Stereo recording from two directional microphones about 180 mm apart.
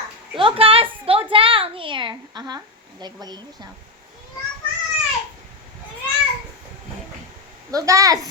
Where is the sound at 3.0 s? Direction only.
25° right (ahead or behind).